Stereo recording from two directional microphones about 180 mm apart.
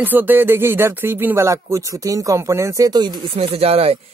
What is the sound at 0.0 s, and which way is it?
Speech, 10° right (ahead or behind).